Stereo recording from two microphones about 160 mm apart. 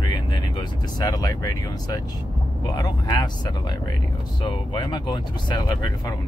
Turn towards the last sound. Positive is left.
turn(degrees=30)  # may be behind; listen again after turning